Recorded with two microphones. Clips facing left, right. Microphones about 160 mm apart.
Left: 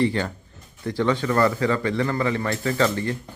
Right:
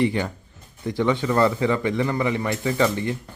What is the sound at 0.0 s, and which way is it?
A man's voice, 15° right (ahead or behind).